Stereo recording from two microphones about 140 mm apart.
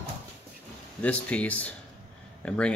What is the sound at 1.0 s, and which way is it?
Speech, 10° left (ahead or behind).